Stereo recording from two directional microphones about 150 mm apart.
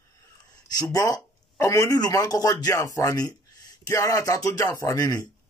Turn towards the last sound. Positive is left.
turn(degrees=25)  # may be behind; listen again after turning